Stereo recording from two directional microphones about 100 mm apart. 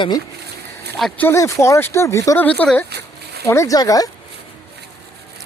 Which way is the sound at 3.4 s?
30° left (ahead or behind).